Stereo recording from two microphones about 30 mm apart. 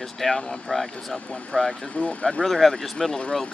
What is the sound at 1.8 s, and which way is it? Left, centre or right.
Speech, left.